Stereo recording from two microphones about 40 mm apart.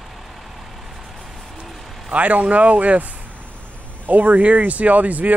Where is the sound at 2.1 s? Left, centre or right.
Right.